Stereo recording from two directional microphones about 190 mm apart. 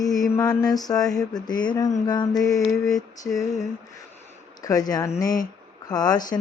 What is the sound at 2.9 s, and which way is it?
Female singing, 20° left (ahead or behind).